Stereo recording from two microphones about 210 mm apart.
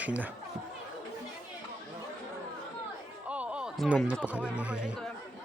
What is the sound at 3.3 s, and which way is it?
Speech, 5° right (ahead or behind).